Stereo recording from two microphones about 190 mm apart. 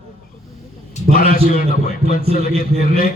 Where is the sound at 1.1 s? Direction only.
45° left (ahead or behind).